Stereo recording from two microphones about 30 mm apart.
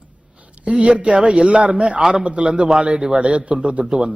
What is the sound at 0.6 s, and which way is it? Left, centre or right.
A man's voice, right.